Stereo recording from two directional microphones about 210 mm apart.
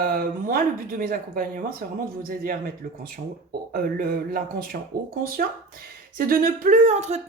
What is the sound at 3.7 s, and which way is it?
Speech, 45° right (ahead or behind).